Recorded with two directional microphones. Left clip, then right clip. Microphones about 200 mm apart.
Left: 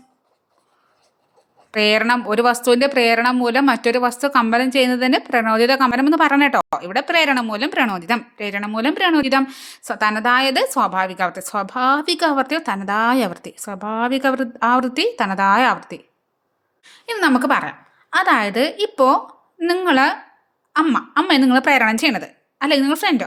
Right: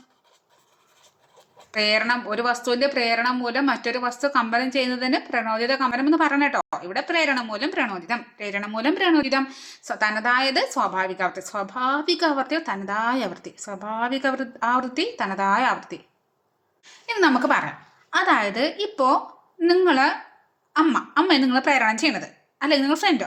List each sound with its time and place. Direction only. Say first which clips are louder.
1.7 s a woman's voice: left 5 dB; 35° left (ahead or behind)